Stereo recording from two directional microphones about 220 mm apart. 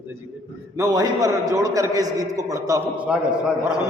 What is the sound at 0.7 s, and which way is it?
A man's voice, 15° right (ahead or behind).